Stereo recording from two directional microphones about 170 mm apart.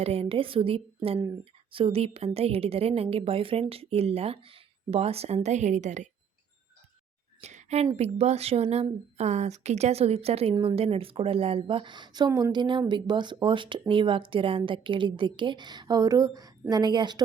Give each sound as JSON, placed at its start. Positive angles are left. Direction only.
{"t": 0.0, "sound": "a woman's voice", "side_deg": -35}
{"t": 7.4, "sound": "a sound", "side_deg": -40}
{"t": 7.9, "sound": "a woman's voice", "side_deg": -40}